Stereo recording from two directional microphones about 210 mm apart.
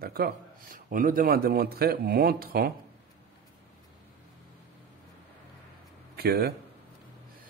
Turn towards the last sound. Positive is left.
turn(degrees=-45)  # may be behind; listen again after turning